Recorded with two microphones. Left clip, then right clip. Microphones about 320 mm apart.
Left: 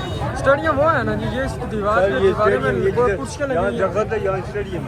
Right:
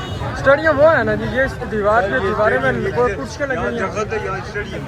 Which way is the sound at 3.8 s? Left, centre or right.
Left.